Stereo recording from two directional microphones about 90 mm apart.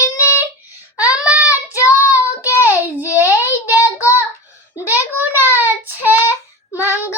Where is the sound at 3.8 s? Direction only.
40° left (ahead or behind).